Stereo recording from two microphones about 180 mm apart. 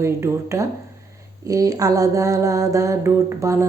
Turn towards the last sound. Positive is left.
turn(degrees=-15)  # may be behind; listen again after turning